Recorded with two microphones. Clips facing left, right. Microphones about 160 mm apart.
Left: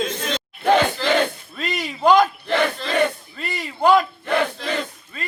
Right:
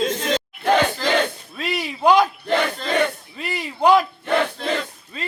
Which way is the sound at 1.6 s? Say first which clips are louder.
Right 1 dB; 5° right (ahead or behind).